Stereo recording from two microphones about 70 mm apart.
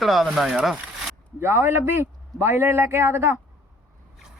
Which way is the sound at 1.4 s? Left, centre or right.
Right.